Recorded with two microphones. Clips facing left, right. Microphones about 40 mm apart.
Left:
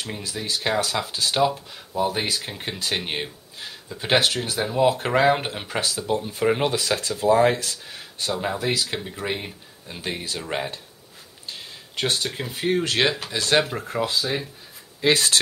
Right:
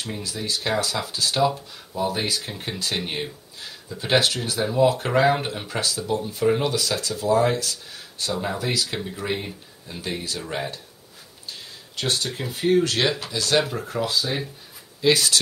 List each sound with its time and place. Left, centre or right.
0.0 s speech: left
8.5 s speech: centre
11.9 s speech: left
12.8 s speech: left
15.0 s speech: left